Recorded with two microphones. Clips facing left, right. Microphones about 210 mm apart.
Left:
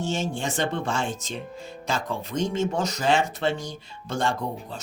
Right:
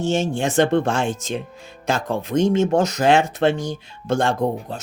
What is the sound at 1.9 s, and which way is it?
Speech, 55° right (ahead or behind).